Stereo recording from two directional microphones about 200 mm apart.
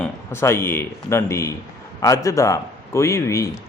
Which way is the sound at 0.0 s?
10° left (ahead or behind).